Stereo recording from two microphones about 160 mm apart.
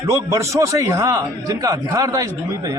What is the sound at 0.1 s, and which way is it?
A man's voice, 20° right (ahead or behind).